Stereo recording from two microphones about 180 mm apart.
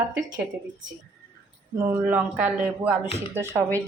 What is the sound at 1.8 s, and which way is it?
Speech, 10° right (ahead or behind).